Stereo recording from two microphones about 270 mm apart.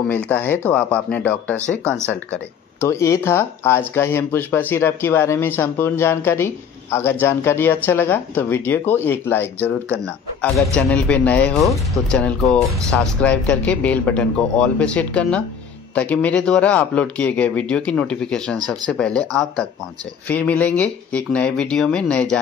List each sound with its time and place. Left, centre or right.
0.3 s speech: centre